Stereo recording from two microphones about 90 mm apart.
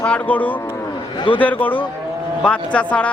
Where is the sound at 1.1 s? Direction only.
70° left (ahead or behind).